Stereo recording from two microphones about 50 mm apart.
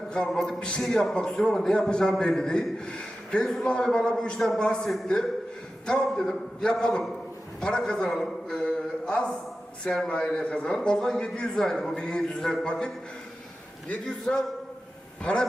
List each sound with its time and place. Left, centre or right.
0.8 s a man's voice: centre
8.6 s a sound: centre
9.8 s a man's voice: centre
10.8 s a man's voice: centre
14.0 s a man's voice: centre